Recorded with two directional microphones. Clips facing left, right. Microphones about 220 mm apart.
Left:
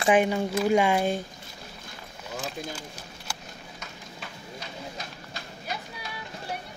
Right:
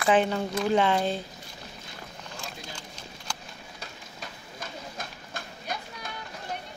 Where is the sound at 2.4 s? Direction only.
5° left (ahead or behind).